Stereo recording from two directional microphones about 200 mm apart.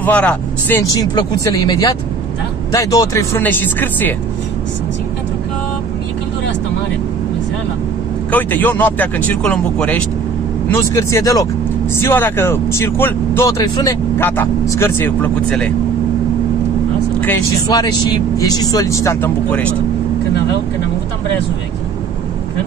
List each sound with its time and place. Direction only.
0.0 s speech: 5° left (ahead or behind)
8.3 s speech: 10° left (ahead or behind)
17.6 s speech: 20° left (ahead or behind)